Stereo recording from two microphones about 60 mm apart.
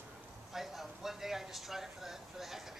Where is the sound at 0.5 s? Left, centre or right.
Centre.